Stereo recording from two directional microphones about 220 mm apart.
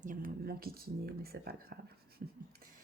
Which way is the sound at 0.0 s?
40° right (ahead or behind).